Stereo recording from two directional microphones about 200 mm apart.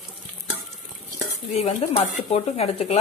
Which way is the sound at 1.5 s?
30° left (ahead or behind).